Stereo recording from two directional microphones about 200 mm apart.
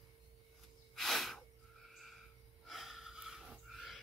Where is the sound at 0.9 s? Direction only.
Centre (ahead or behind).